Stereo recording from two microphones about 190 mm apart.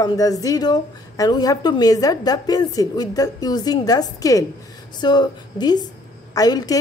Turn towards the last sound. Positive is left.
turn(degrees=20)  # may be behind; listen again after turning